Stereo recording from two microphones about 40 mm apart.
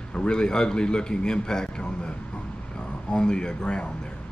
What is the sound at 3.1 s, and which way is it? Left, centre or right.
Speech, centre.